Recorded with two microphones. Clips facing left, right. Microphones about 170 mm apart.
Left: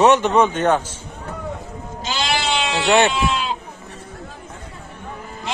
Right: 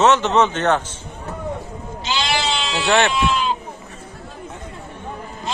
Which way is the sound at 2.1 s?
50° left (ahead or behind).